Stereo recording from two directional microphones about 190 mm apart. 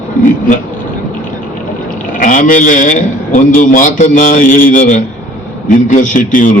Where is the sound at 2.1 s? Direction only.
45° left (ahead or behind).